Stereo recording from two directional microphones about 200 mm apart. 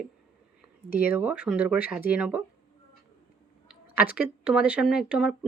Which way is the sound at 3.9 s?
5° right (ahead or behind).